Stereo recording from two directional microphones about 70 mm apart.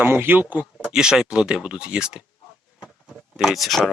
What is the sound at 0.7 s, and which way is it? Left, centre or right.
Speech, centre.